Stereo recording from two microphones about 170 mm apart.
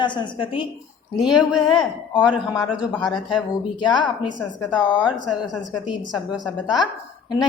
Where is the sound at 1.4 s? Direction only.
25° left (ahead or behind).